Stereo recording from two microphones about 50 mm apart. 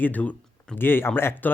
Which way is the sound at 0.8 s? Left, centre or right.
Left.